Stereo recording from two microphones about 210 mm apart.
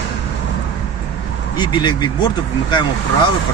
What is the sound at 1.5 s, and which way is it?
Speech, 20° left (ahead or behind).